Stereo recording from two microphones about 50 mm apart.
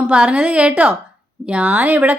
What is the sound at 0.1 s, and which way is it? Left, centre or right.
A woman's voice, right.